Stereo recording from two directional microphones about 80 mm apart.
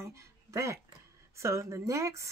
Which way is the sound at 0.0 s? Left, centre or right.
Right.